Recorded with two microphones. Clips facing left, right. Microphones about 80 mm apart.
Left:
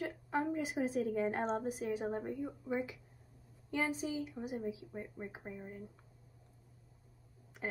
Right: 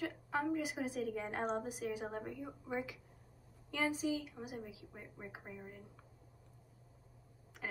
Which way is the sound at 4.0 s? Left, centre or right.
Left.